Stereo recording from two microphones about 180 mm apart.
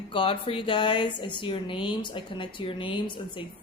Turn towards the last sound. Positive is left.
turn(degrees=25)  # may be behind; listen again after turning